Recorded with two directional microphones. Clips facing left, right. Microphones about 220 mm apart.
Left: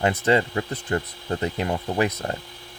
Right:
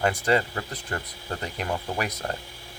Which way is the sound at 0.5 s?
25° left (ahead or behind).